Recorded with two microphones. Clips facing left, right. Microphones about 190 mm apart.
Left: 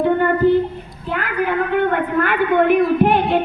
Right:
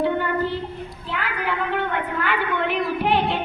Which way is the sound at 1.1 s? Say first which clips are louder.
Left 7 dB; 50° left (ahead or behind).